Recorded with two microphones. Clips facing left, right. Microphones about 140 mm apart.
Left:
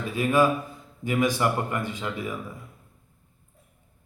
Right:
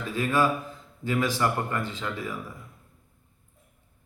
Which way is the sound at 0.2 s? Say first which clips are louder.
Left 3 dB; 15° left (ahead or behind).